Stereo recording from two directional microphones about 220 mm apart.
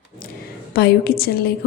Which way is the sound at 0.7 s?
45° left (ahead or behind).